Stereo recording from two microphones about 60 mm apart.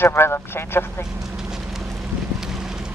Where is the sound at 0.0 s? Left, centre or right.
Left.